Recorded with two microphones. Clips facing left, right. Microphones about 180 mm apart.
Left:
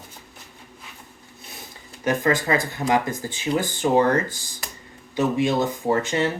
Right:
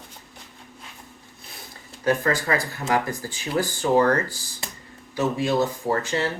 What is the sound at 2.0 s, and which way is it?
Speech, 20° left (ahead or behind).